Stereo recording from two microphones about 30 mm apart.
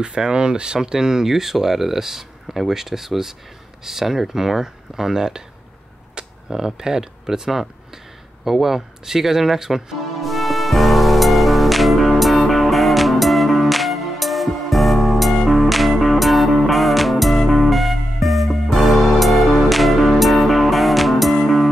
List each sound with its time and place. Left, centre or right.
0.2 s speech: right
0.8 s speech: centre
6.2 s arrow: right
6.5 s speech: centre
10.2 s music: centre